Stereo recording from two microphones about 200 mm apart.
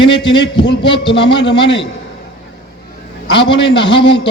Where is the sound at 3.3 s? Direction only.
25° left (ahead or behind).